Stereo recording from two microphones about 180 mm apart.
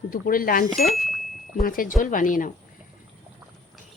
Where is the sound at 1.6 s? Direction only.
50° left (ahead or behind).